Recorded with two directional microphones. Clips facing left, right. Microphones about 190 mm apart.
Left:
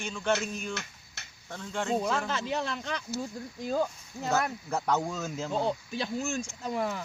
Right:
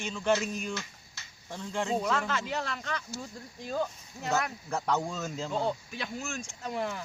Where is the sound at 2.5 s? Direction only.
25° left (ahead or behind).